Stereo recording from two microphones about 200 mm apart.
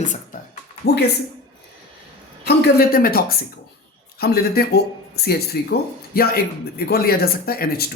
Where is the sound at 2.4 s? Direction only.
45° left (ahead or behind).